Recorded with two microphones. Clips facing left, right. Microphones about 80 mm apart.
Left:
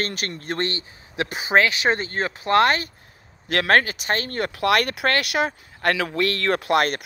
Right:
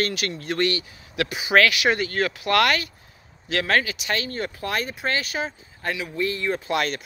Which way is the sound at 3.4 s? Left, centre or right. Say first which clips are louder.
Left 4 dB; left.